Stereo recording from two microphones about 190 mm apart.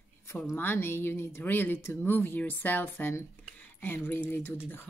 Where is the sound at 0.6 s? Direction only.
10° left (ahead or behind).